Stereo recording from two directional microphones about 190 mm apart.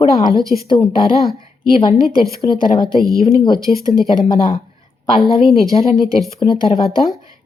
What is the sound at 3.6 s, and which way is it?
Speech, 20° right (ahead or behind).